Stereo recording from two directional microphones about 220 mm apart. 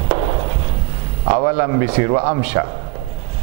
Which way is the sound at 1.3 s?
15° right (ahead or behind).